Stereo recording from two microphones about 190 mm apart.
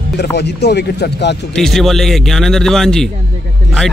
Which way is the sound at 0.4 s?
60° left (ahead or behind).